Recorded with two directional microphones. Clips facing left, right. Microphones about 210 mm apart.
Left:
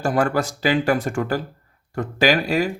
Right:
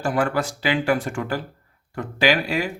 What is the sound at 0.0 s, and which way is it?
Speech, 40° left (ahead or behind).